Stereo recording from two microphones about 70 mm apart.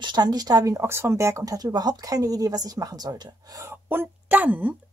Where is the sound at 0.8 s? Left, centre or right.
Right.